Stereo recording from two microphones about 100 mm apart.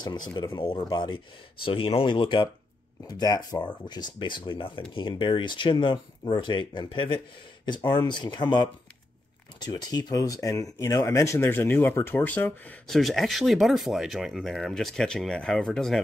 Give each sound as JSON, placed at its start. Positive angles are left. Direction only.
{"t": 0.0, "sound": "speech", "side_deg": 45}
{"t": 1.6, "sound": "speech", "side_deg": 65}
{"t": 3.1, "sound": "speech", "side_deg": 40}
{"t": 12.8, "sound": "speech", "side_deg": 5}